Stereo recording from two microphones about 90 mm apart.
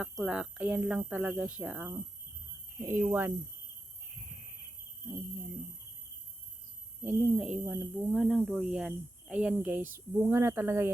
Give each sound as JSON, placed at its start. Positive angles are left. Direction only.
{"t": 0.0, "sound": "a woman's voice", "side_deg": -10}
{"t": 7.0, "sound": "a woman's voice", "side_deg": -20}